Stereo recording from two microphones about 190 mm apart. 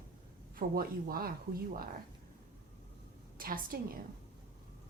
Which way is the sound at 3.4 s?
50° right (ahead or behind).